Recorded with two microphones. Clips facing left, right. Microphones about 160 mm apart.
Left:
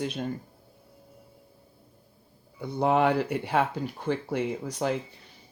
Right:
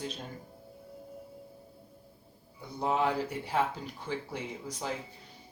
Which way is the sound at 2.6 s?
65° left (ahead or behind).